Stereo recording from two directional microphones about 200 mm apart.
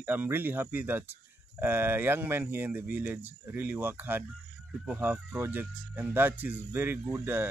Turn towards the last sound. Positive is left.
turn(degrees=-10)  # may be behind; listen again after turning